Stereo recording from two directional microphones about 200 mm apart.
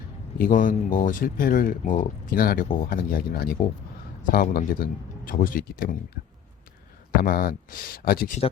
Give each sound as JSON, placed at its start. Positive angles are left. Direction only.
{"t": 0.3, "sound": "speech", "side_deg": 40}
{"t": 7.2, "sound": "speech", "side_deg": 45}